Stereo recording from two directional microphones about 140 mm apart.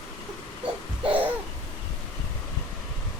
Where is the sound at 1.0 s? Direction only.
10° right (ahead or behind).